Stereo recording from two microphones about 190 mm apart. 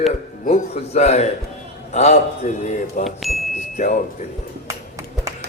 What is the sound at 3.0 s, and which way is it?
Speech, centre (ahead or behind).